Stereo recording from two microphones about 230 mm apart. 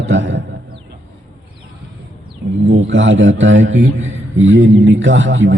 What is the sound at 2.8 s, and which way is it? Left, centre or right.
A man's voice, right.